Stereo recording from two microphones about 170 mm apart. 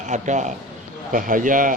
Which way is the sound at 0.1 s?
45° right (ahead or behind).